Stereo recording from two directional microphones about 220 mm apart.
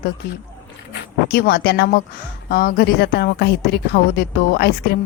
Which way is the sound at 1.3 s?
45° left (ahead or behind).